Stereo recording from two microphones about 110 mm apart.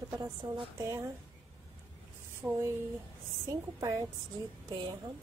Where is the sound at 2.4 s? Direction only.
5° right (ahead or behind).